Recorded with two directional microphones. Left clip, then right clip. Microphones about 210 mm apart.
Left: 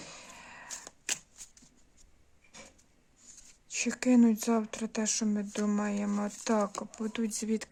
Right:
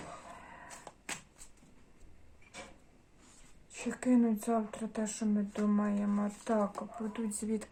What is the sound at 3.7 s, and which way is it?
Speech, 35° left (ahead or behind).